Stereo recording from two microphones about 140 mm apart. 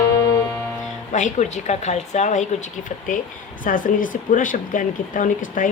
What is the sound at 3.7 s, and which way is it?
Speech, 75° left (ahead or behind).